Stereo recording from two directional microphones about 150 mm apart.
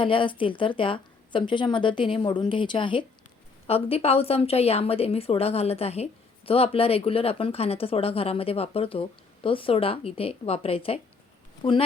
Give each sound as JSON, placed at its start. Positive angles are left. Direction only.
{"t": 0.0, "sound": "a woman's voice", "side_deg": 35}